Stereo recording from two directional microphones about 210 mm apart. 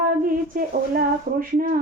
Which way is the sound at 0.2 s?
40° right (ahead or behind).